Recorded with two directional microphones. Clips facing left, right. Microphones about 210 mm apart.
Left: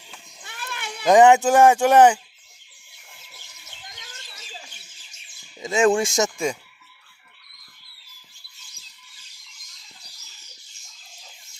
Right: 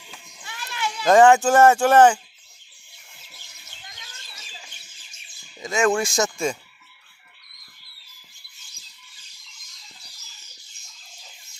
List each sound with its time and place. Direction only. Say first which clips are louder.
0.4 s goat: right 5 dB; 55° left (ahead or behind)
1.0 s speech: left 1 dB; 20° left (ahead or behind)
5.5 s speech: left 2 dB; 25° left (ahead or behind)